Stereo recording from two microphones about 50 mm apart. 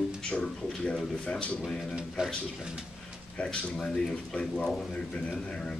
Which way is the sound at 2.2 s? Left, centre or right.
Centre.